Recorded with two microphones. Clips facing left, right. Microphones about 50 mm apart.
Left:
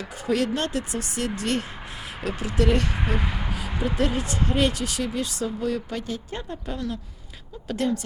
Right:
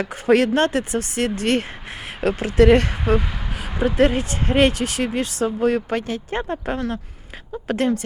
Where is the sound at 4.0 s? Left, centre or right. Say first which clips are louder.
Right 7 dB; right.